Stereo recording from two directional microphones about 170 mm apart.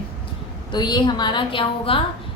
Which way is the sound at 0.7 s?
25° left (ahead or behind).